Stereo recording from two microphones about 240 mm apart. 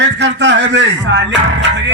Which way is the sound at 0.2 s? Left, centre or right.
Right.